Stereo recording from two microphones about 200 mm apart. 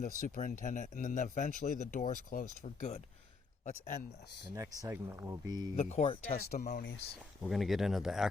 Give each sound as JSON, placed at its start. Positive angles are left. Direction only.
{"t": 0.0, "sound": "speech", "side_deg": 40}
{"t": 4.5, "sound": "speech", "side_deg": -15}
{"t": 5.7, "sound": "speech", "side_deg": 35}
{"t": 7.4, "sound": "speech", "side_deg": 0}